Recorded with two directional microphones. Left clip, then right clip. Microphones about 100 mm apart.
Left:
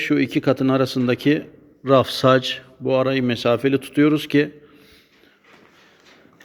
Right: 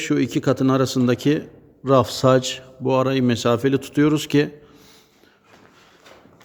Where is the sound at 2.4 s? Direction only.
40° right (ahead or behind).